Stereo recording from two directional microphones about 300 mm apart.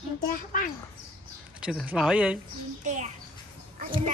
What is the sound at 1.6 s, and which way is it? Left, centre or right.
Speech, centre.